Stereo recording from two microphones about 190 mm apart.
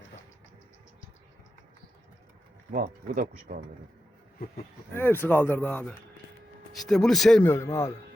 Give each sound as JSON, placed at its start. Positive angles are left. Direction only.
{"t": 2.7, "sound": "speech", "side_deg": -45}
{"t": 4.9, "sound": "speech", "side_deg": 10}
{"t": 7.4, "sound": "speech", "side_deg": 15}